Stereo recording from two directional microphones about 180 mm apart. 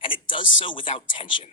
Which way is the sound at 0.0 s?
30° left (ahead or behind).